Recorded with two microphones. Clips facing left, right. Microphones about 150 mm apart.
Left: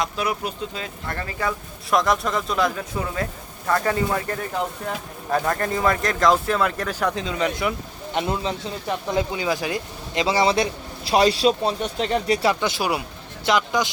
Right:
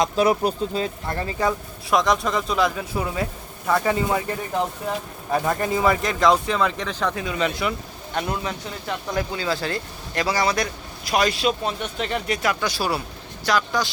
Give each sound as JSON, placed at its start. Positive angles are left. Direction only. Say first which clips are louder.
{"t": 0.0, "sound": "speech", "louder": "right 6 dB", "side_deg": -30}
{"t": 1.0, "sound": "speech", "louder": "even", "side_deg": -25}
{"t": 1.9, "sound": "speech", "louder": "even", "side_deg": 0}
{"t": 5.3, "sound": "speech", "louder": "even", "side_deg": -10}
{"t": 7.3, "sound": "speech", "louder": "even", "side_deg": 20}